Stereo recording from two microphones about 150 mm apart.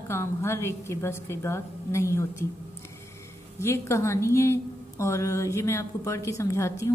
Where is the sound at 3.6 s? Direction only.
20° left (ahead or behind).